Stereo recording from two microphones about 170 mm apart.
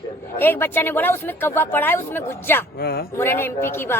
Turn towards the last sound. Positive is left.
turn(degrees=15)  # may be behind; listen again after turning